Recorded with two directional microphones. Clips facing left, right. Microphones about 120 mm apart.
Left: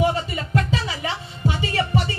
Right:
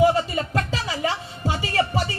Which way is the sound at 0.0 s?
30° right (ahead or behind).